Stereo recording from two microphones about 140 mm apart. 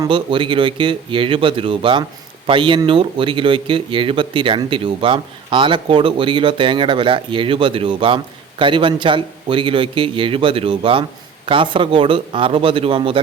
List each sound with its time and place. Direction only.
0.0 s speech: 35° right (ahead or behind)